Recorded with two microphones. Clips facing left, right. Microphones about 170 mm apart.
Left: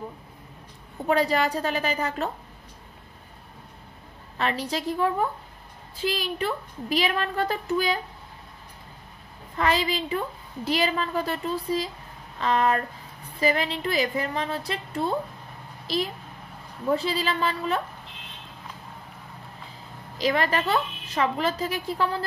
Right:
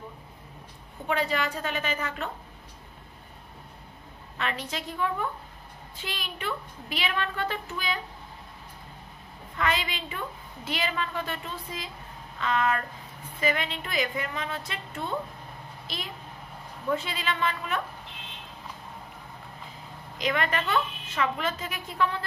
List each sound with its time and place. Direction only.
1.0 s a woman's voice: 40° left (ahead or behind)
4.4 s a woman's voice: 35° left (ahead or behind)
9.6 s a woman's voice: 35° left (ahead or behind)
20.2 s a woman's voice: 35° left (ahead or behind)